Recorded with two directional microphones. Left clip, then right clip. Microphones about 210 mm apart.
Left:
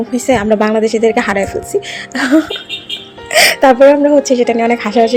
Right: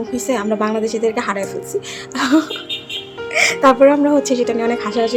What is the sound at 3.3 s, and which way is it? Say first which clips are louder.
Speech: left 7 dB; 25° left (ahead or behind).